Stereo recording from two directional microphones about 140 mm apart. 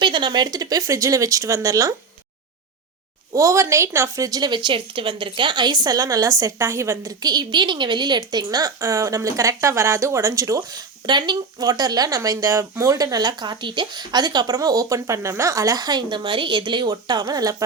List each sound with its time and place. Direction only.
0.0 s a woman's voice: 35° right (ahead or behind)
3.3 s a woman's voice: 20° right (ahead or behind)